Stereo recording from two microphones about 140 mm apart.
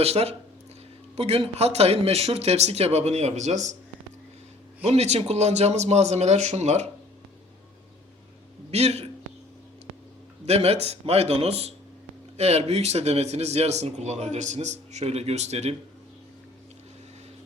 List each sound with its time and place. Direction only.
0.0 s speech: 45° right (ahead or behind)
4.8 s speech: 50° right (ahead or behind)
8.7 s speech: 50° right (ahead or behind)
10.4 s speech: 50° right (ahead or behind)